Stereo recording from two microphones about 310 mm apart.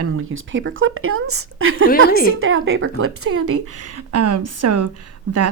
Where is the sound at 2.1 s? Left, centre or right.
Left.